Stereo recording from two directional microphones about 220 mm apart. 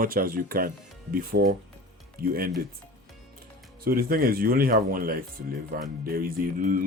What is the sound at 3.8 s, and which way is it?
Speech, 40° right (ahead or behind).